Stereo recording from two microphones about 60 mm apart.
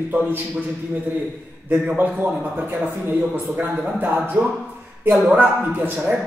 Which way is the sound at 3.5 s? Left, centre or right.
Right.